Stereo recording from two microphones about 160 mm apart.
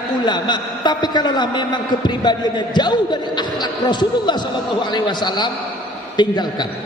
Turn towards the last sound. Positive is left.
turn(degrees=25)  # may be behind; listen again after turning